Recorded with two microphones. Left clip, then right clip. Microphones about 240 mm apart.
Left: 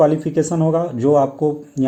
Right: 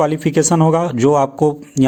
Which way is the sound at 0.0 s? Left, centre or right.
Right.